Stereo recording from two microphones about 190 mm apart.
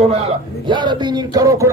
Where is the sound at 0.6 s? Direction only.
25° right (ahead or behind).